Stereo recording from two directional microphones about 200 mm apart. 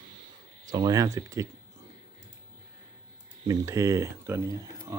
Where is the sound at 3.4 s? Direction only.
15° right (ahead or behind).